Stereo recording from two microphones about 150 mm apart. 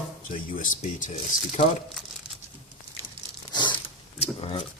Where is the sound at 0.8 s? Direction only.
60° left (ahead or behind).